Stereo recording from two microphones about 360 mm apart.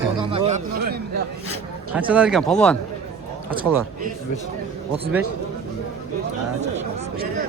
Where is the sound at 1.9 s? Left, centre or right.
Centre.